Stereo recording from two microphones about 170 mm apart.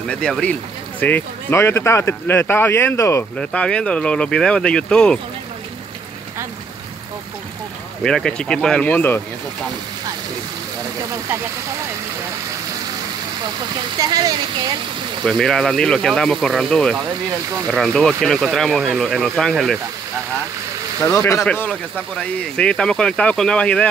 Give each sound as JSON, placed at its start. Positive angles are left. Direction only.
{"t": 0.1, "sound": "speech", "side_deg": 5}
{"t": 8.0, "sound": "speech", "side_deg": 5}
{"t": 14.0, "sound": "speech", "side_deg": -20}
{"t": 15.2, "sound": "speech", "side_deg": 5}
{"t": 21.0, "sound": "speech", "side_deg": 15}